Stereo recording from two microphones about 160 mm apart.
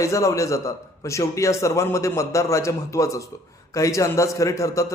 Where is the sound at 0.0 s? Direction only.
20° left (ahead or behind).